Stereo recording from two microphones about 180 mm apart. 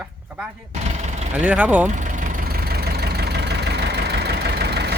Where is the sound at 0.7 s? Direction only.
40° right (ahead or behind).